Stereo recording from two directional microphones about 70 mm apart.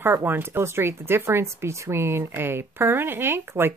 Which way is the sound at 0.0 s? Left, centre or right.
Right.